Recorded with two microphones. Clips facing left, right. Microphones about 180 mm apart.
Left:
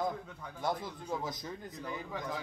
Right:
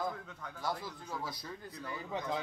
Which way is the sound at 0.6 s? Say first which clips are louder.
Left 3 dB; 20° left (ahead or behind).